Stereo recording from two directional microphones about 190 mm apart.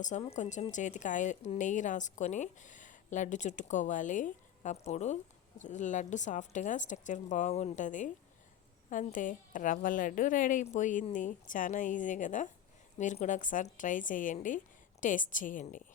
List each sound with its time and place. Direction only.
0.0 s a woman's voice: 35° left (ahead or behind)